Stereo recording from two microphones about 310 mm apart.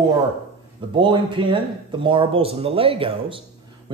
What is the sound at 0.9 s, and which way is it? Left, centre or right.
Speech, centre.